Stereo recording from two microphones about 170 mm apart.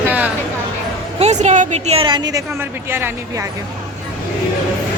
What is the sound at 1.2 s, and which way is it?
A woman's voice, 40° right (ahead or behind).